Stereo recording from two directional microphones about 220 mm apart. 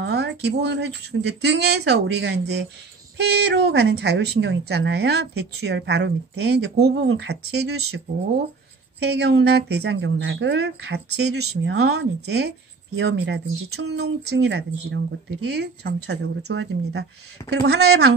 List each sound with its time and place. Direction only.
0.0 s a woman's voice: 50° right (ahead or behind)
9.0 s a woman's voice: 50° right (ahead or behind)